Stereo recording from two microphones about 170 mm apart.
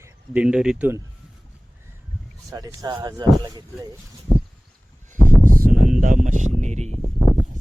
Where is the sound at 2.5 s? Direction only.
20° right (ahead or behind).